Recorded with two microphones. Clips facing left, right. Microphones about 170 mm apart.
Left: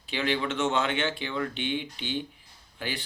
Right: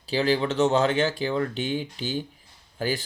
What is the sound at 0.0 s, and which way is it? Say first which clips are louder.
Speech: right 6 dB; 35° right (ahead or behind).